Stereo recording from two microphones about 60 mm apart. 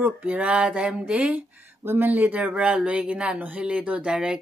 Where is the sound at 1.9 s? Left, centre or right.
Right.